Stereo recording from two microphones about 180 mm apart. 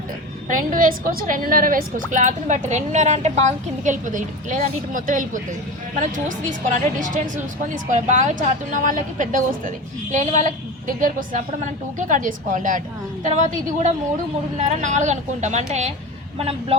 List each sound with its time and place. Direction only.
0.4 s a woman's voice: 45° right (ahead or behind)